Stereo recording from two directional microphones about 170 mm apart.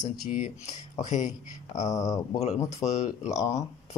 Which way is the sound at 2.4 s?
40° left (ahead or behind).